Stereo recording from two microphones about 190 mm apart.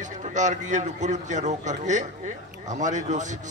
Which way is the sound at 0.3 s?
40° right (ahead or behind).